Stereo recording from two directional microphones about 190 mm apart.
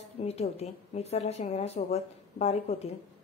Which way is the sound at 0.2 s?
35° left (ahead or behind).